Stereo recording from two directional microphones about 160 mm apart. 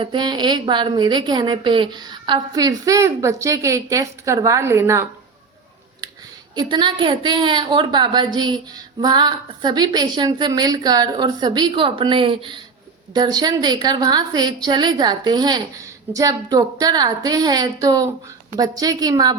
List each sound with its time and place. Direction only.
0.0 s a woman's voice: 30° right (ahead or behind)
6.6 s a woman's voice: 30° right (ahead or behind)